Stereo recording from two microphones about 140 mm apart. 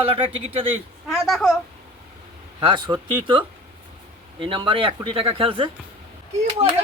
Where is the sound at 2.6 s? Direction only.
35° right (ahead or behind).